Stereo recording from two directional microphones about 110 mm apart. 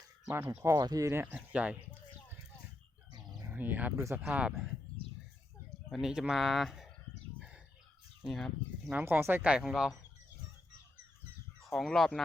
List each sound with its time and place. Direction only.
0.3 s speech: 20° right (ahead or behind)
1.4 s speech: 10° right (ahead or behind)
3.5 s speech: 15° right (ahead or behind)
5.9 s speech: 5° right (ahead or behind)
7.3 s chicken: 10° right (ahead or behind)
8.2 s speech: centre (ahead or behind)
8.9 s speech: 15° right (ahead or behind)
11.6 s speech: 5° left (ahead or behind)